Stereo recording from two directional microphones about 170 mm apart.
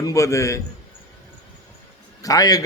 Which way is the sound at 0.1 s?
15° left (ahead or behind).